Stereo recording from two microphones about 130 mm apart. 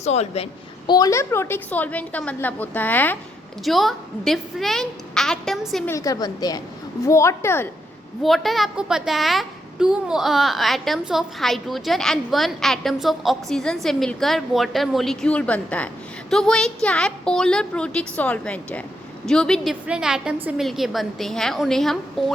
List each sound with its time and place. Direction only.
0.0 s a woman's voice: 55° left (ahead or behind)
0.9 s a woman's voice: 30° left (ahead or behind); by 3.2 s 15° left (ahead or behind)
3.6 s a woman's voice: centre (ahead or behind)
5.9 s a woman's voice: 25° left (ahead or behind)
8.2 s a woman's voice: centre (ahead or behind)